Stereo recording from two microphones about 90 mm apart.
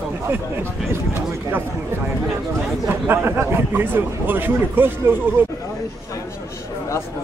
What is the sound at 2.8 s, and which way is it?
A man's voice, 25° right (ahead or behind).